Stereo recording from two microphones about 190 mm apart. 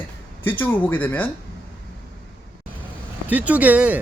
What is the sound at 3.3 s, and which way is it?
Speech, 10° right (ahead or behind).